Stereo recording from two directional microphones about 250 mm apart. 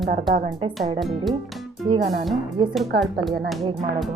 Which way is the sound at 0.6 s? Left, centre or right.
Centre.